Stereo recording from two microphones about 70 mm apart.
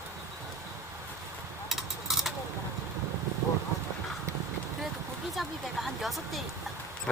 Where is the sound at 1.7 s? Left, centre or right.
Centre.